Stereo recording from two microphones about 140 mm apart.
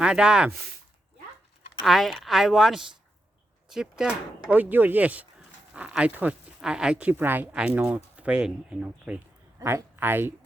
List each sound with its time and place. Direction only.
0.0 s speech: 5° right (ahead or behind)
1.8 s speech: centre (ahead or behind)
9.6 s speech: 20° right (ahead or behind)